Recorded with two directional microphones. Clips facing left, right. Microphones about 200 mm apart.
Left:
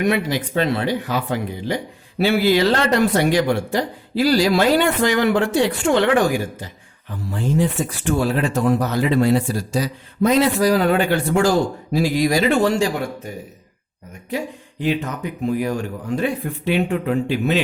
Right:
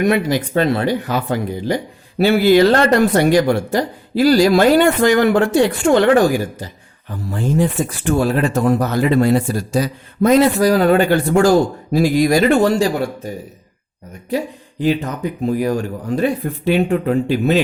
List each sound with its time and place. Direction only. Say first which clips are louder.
0.0 s speech: right 4 dB; 45° right (ahead or behind)
7.3 s speech: right 2 dB; 45° right (ahead or behind)